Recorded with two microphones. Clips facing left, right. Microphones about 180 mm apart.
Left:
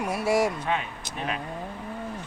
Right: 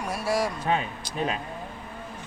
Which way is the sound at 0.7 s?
35° right (ahead or behind).